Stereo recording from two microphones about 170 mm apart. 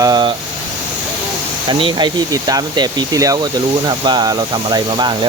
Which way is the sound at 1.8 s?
25° right (ahead or behind).